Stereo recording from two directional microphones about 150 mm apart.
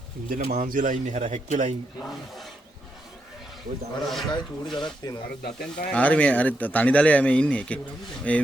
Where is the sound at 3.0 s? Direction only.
Centre (ahead or behind).